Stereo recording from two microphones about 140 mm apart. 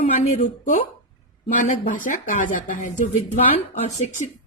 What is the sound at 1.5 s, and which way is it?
Speech, 70° left (ahead or behind).